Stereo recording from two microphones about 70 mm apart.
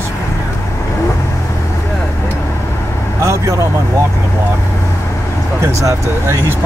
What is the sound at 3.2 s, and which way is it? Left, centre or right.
Vehicle, right.